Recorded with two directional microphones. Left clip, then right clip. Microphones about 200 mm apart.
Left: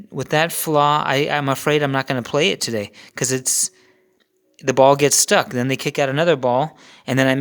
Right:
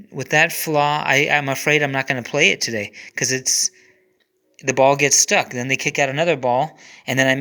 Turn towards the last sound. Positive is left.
turn(degrees=20)  # may be behind; listen again after turning